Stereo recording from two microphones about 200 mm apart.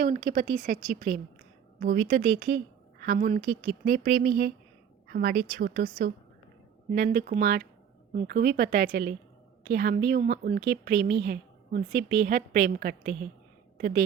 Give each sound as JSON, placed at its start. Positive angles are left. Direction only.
{"t": 0.0, "sound": "a woman's voice", "side_deg": -45}
{"t": 6.9, "sound": "a woman's voice", "side_deg": -55}